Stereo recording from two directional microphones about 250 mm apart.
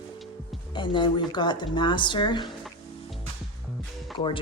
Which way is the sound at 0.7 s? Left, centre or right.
Centre.